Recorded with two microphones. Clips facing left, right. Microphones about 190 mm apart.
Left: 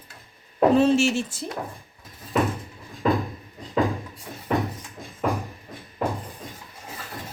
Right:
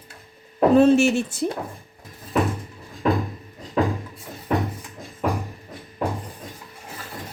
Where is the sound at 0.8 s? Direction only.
55° right (ahead or behind).